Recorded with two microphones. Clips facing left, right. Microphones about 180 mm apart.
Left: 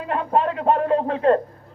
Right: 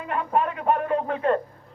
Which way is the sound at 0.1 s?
30° left (ahead or behind).